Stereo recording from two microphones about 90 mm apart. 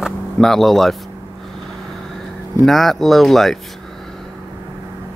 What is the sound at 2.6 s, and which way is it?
Speech, centre (ahead or behind).